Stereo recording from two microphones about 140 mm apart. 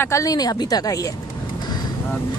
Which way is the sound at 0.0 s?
25° left (ahead or behind).